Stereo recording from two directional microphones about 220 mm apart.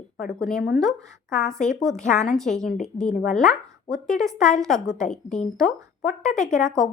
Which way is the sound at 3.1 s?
40° left (ahead or behind).